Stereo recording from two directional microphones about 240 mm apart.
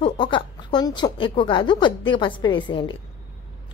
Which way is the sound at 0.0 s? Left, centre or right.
Centre.